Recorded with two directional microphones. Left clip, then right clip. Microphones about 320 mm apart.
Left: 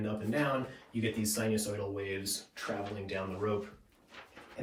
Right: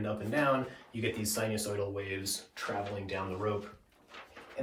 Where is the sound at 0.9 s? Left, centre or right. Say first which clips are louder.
Even; centre.